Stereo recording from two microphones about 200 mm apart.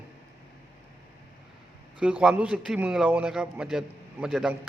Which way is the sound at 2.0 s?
5° right (ahead or behind).